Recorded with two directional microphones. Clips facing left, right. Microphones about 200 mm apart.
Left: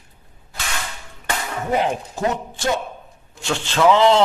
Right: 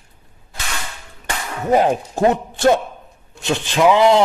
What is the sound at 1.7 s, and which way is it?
A man's voice, 45° right (ahead or behind).